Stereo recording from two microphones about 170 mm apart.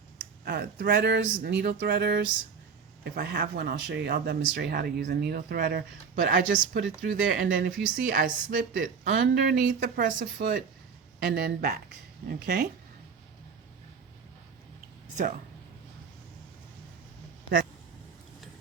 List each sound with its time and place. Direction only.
0.4 s speech: 65° right (ahead or behind)